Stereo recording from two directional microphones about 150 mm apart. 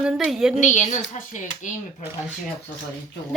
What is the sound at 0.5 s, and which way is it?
Speech, 55° left (ahead or behind).